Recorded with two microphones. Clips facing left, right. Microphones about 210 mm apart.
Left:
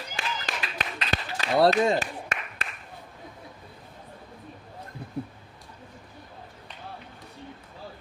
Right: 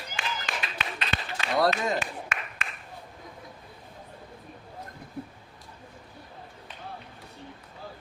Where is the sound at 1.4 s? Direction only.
30° left (ahead or behind).